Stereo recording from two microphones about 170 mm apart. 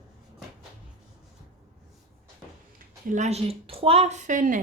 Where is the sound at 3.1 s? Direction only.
40° right (ahead or behind).